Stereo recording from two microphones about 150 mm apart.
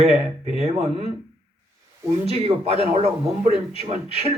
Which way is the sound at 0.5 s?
45° right (ahead or behind).